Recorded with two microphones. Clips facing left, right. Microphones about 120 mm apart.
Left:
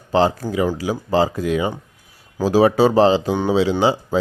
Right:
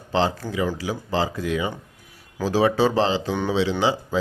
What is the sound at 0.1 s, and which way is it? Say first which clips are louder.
Speech: left 5 dB; 35° left (ahead or behind).